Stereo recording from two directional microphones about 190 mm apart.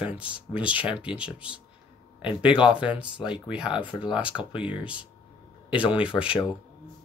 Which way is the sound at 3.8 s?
25° left (ahead or behind).